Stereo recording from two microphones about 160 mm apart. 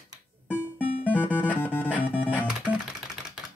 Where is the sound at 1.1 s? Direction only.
10° left (ahead or behind).